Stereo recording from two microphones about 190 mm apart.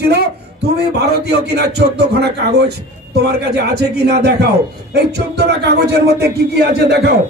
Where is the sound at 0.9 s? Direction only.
60° right (ahead or behind).